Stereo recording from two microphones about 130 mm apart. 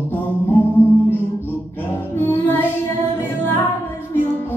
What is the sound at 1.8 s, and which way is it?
Music, 15° left (ahead or behind).